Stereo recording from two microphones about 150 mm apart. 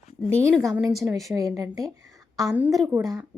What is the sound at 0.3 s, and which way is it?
Speech, 15° right (ahead or behind).